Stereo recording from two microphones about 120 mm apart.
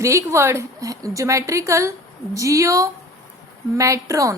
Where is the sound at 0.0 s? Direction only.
25° right (ahead or behind).